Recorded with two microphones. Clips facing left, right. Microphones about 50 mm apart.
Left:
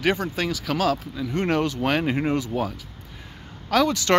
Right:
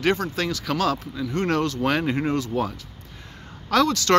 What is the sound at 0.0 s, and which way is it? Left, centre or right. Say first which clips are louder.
Speech: right 1 dB; centre.